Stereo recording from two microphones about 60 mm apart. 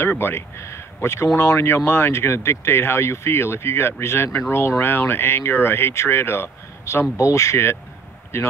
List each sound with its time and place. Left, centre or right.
0.1 s speech: left
1.2 s speech: left
1.9 s speech: left